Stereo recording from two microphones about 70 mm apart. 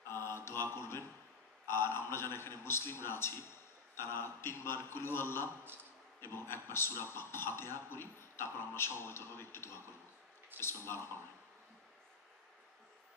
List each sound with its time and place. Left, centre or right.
0.0 s mantra: left
1.7 s a man's voice: left